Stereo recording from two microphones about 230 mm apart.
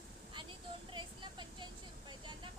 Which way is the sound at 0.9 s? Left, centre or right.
Centre.